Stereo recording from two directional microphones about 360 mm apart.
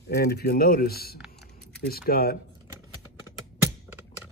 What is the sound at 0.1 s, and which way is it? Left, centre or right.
Speech, left.